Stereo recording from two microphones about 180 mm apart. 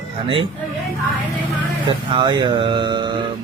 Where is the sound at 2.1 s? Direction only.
25° right (ahead or behind).